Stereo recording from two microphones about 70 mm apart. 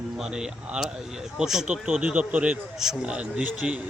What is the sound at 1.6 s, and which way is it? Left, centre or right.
Speech, centre.